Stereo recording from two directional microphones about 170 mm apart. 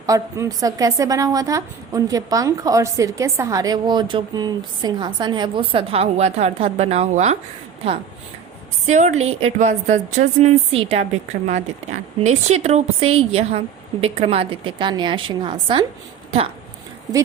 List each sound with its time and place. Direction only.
0.0 s a woman's voice: 20° right (ahead or behind); by 7.3 s 40° right (ahead or behind)
8.9 s a woman's voice: 45° right (ahead or behind); by 15.9 s 30° right (ahead or behind)